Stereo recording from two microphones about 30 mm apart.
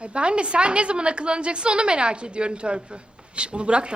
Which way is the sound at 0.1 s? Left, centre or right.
Right.